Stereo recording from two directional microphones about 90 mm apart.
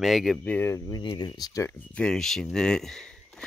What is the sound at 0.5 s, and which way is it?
Speech, 25° left (ahead or behind).